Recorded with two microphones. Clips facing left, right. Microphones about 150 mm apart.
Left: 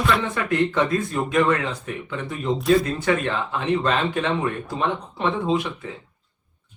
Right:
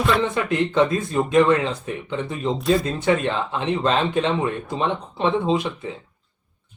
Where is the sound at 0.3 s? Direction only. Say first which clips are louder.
Right 2 dB; 20° right (ahead or behind).